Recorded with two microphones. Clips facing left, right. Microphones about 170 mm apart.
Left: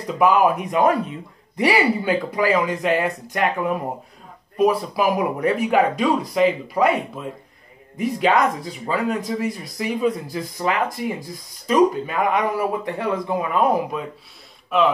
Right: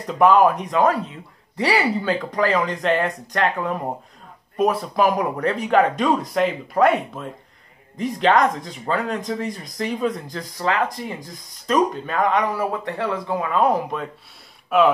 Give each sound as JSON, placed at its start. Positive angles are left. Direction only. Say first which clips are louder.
{"t": 0.0, "sound": "speech", "louder": "right 2 dB", "side_deg": 5}
{"t": 10.6, "sound": "speech", "louder": "even", "side_deg": 15}